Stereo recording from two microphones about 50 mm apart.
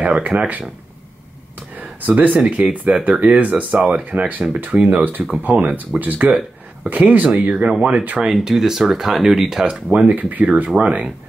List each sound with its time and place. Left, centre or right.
0.0 s speech: right
1.8 s speech: right
8.5 s speech: centre
9.8 s speech: right
10.1 s speech: right